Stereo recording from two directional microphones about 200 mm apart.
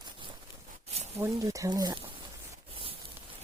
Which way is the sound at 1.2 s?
15° right (ahead or behind).